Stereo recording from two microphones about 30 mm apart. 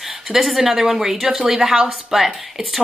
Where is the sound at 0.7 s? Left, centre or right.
Centre.